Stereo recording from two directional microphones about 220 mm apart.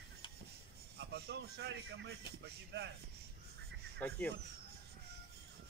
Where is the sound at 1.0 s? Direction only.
50° right (ahead or behind).